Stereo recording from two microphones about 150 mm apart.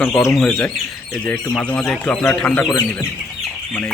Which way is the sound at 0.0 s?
5° left (ahead or behind).